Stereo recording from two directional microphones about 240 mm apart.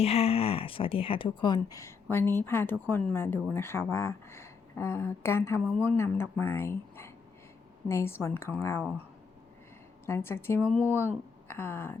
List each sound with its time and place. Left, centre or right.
0.0 s speech: left
10.1 s speech: centre